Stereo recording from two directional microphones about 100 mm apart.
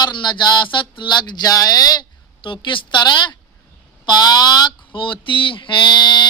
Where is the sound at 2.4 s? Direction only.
55° left (ahead or behind).